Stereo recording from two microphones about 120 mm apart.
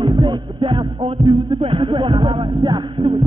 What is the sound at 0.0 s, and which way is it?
Music, 40° right (ahead or behind).